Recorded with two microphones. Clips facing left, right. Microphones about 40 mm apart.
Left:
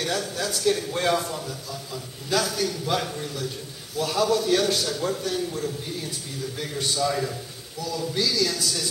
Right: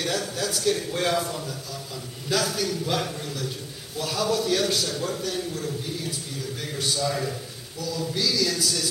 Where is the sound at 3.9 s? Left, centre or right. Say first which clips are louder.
Left 3 dB; centre.